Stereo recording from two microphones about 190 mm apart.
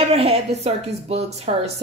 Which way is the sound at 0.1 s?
30° right (ahead or behind).